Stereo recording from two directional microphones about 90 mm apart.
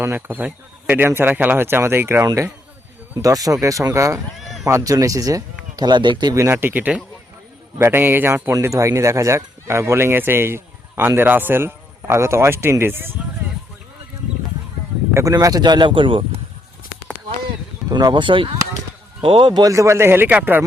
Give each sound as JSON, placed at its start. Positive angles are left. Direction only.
{"t": 0.0, "sound": "speech", "side_deg": -25}
{"t": 2.2, "sound": "speech", "side_deg": -35}
{"t": 6.3, "sound": "speech", "side_deg": -30}
{"t": 15.1, "sound": "speech", "side_deg": -35}
{"t": 17.9, "sound": "speech", "side_deg": -60}
{"t": 19.2, "sound": "a man's voice", "side_deg": -85}
{"t": 19.5, "sound": "speech", "side_deg": -35}